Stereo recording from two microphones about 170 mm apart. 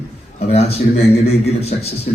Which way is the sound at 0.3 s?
40° left (ahead or behind).